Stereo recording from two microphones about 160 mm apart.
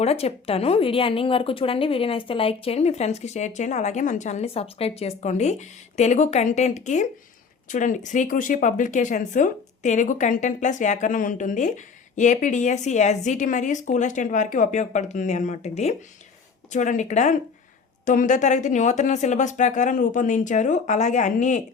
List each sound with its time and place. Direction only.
0.0 s speech: 40° left (ahead or behind)